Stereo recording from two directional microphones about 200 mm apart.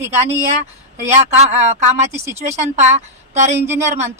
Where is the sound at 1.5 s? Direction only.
35° right (ahead or behind).